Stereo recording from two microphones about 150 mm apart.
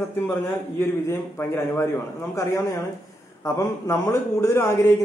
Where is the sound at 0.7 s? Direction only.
15° left (ahead or behind).